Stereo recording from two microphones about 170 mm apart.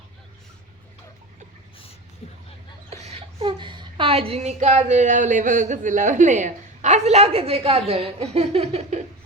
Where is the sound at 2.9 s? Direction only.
40° right (ahead or behind).